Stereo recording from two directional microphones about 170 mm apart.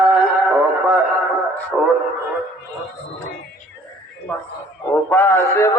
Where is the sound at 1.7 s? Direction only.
5° right (ahead or behind).